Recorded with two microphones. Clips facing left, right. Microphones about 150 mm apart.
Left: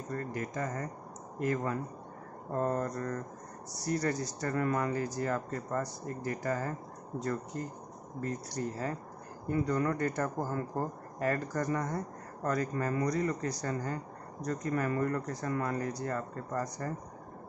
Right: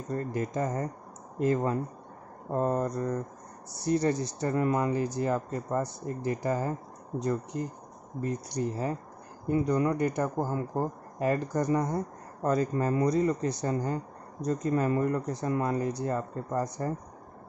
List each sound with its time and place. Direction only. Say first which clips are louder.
0.1 s speech: right 6 dB; 25° right (ahead or behind)